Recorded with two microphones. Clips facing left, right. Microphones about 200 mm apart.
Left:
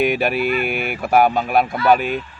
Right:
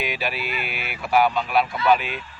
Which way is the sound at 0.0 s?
55° left (ahead or behind).